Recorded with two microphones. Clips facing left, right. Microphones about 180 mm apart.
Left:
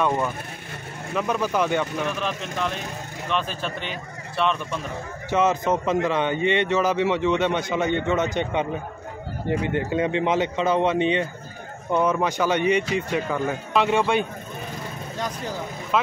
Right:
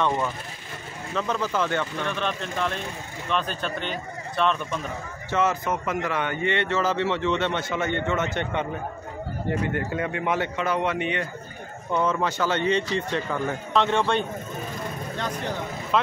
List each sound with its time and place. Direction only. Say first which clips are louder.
0.0 s a man's voice: left 2 dB; 10° left (ahead or behind)
2.0 s speech: left 1 dB; 5° left (ahead or behind)
5.3 s a man's voice: left 3 dB; 20° left (ahead or behind)